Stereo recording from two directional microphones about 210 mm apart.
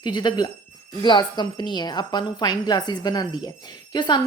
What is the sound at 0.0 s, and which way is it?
Speech, 20° left (ahead or behind).